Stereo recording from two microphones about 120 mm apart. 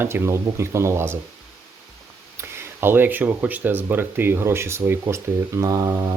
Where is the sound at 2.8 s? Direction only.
15° right (ahead or behind).